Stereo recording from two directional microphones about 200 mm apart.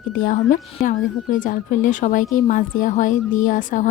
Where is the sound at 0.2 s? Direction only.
40° left (ahead or behind).